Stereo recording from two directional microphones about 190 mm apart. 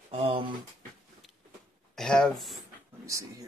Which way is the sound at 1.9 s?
5° left (ahead or behind).